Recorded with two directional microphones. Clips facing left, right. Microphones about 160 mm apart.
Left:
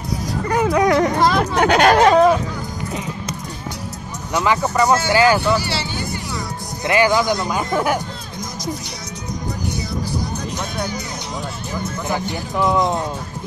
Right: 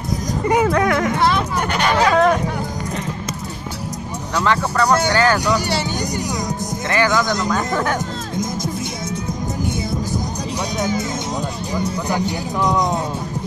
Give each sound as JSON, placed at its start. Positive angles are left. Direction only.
{"t": 0.7, "sound": "speech", "side_deg": 25}
{"t": 1.1, "sound": "a sound", "side_deg": 40}
{"t": 1.6, "sound": "speech", "side_deg": 85}
{"t": 2.0, "sound": "speech", "side_deg": 20}
{"t": 4.4, "sound": "speech", "side_deg": 10}
{"t": 6.9, "sound": "speech", "side_deg": 15}
{"t": 12.5, "sound": "speech", "side_deg": 5}